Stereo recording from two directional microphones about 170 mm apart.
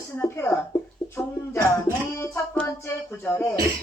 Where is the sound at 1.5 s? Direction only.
15° left (ahead or behind).